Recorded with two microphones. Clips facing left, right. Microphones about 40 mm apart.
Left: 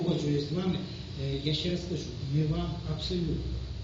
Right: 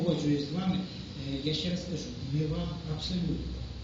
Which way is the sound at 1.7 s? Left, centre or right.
Left.